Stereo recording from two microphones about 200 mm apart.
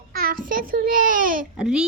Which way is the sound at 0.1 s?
45° right (ahead or behind).